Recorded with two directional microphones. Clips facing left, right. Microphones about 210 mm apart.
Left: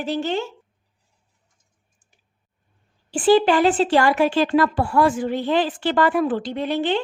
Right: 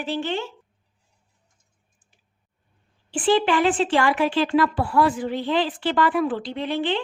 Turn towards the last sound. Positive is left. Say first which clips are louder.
# left 3 dB
turn(degrees=45)  # may be behind; listen again after turning